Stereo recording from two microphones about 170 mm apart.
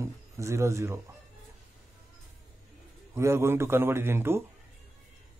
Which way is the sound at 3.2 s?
15° right (ahead or behind).